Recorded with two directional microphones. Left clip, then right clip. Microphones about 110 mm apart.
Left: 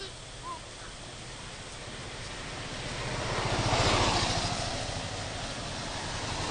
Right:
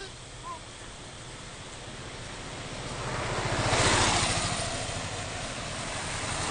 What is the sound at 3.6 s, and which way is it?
Vehicle, 45° right (ahead or behind).